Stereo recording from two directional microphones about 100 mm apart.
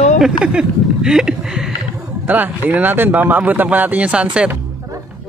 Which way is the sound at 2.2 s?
15° right (ahead or behind).